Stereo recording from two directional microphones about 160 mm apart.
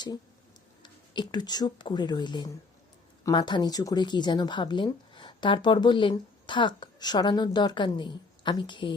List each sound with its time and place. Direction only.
0.8 s speech: 30° left (ahead or behind)